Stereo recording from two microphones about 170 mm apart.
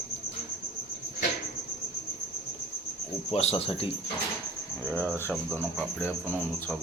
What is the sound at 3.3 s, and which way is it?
Speech, 35° left (ahead or behind).